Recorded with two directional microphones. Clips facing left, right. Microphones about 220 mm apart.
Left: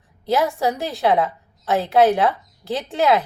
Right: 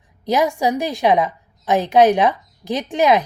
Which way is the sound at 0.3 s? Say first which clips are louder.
Right 2 dB; 15° right (ahead or behind).